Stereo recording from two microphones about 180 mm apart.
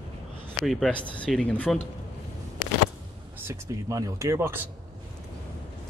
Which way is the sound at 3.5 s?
15° right (ahead or behind).